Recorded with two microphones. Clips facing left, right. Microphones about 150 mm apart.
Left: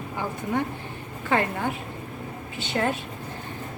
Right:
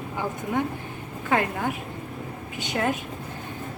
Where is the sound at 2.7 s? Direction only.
15° right (ahead or behind).